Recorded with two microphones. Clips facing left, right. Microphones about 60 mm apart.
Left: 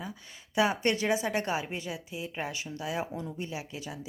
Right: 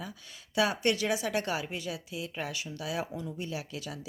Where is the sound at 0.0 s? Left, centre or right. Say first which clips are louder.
Left 2 dB; left.